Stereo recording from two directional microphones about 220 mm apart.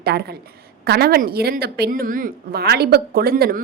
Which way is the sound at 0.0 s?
45° right (ahead or behind).